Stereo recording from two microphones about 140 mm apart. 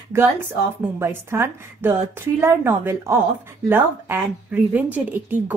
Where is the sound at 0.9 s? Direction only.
20° right (ahead or behind).